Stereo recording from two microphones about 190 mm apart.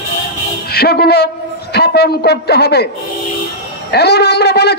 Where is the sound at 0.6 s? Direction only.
55° left (ahead or behind).